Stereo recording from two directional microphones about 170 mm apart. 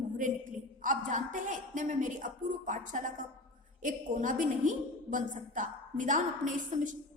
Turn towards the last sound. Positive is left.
turn(degrees=-50)  # may be behind; listen again after turning